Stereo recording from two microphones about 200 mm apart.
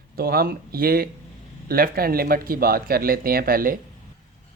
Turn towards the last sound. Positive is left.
turn(degrees=-45)  # may be behind; listen again after turning